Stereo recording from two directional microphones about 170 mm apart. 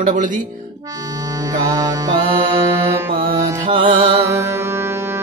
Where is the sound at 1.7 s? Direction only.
20° right (ahead or behind).